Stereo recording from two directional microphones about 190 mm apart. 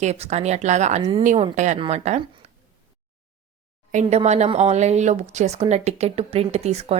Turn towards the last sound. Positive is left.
turn(degrees=-35)  # may be behind; listen again after turning